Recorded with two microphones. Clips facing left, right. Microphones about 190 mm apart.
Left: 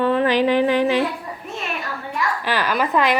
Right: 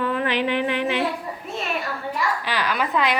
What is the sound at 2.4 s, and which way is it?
Speech, 45° left (ahead or behind).